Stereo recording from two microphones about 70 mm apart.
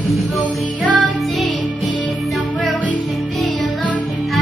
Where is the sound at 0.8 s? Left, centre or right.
Centre.